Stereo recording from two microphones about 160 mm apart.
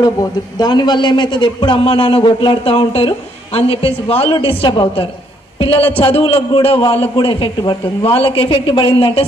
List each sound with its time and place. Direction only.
0.6 s a man's voice: 25° left (ahead or behind)